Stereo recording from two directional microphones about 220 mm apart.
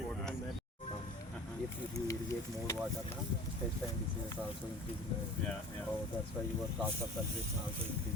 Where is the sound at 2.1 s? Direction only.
15° left (ahead or behind).